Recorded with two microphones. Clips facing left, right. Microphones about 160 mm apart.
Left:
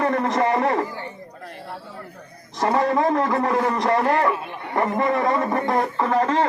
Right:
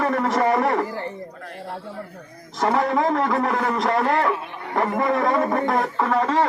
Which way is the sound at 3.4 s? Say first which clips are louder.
Left 2 dB; 25° left (ahead or behind).